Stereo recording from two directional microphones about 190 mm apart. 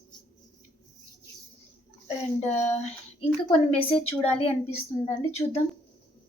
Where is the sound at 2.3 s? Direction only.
35° left (ahead or behind).